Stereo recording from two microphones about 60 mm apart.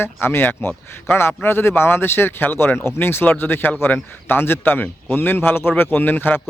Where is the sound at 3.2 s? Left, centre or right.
Left.